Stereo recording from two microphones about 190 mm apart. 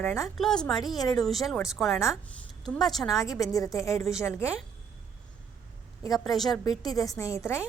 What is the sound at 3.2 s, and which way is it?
Speech, 15° left (ahead or behind).